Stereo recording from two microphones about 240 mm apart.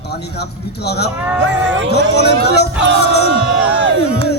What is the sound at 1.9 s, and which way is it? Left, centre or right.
Speech, left.